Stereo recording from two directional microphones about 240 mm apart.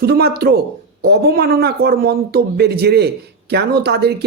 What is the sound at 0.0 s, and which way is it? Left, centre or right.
A man's voice, right.